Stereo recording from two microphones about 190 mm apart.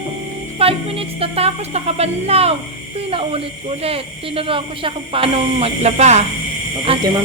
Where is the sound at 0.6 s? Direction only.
30° right (ahead or behind).